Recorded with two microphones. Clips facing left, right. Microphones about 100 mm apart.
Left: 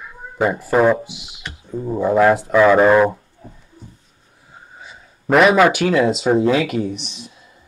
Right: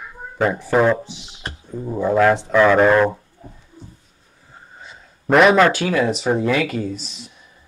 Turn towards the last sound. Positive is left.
turn(degrees=70)  # may be behind; listen again after turning